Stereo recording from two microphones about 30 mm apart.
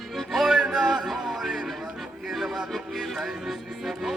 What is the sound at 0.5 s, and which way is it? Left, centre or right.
Music, right.